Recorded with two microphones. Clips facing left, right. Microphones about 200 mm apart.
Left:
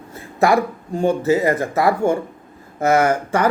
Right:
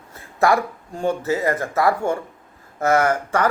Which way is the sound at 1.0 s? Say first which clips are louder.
Left 5 dB; 25° left (ahead or behind).